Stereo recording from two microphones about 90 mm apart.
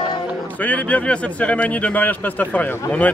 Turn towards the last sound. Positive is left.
turn(degrees=20)  # may be behind; listen again after turning